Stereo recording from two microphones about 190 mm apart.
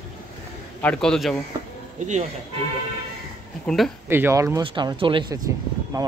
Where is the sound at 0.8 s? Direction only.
5° left (ahead or behind).